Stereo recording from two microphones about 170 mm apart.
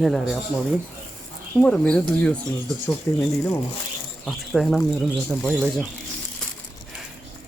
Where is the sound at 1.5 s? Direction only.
5° left (ahead or behind).